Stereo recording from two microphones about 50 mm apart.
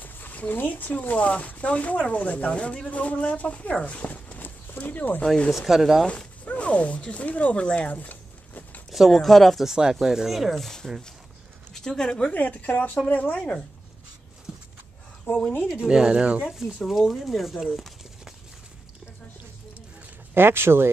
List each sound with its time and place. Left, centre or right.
0.0 s speech: left
3.8 s a sound: left
5.7 s speech: centre
6.0 s speech: left
8.9 s speech: centre
9.7 s speech: centre
11.7 s speech: centre
12.3 s a woman's voice: left
15.8 s speech: centre
16.4 s speech: centre
20.3 s speech: right